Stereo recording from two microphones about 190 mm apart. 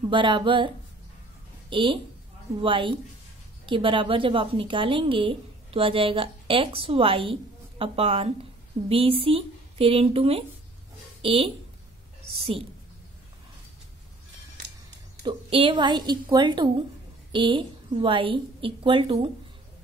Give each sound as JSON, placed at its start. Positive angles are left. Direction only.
{"t": 0.1, "sound": "a woman's voice", "side_deg": -25}
{"t": 1.7, "sound": "a woman's voice", "side_deg": -25}
{"t": 15.2, "sound": "a woman's voice", "side_deg": -25}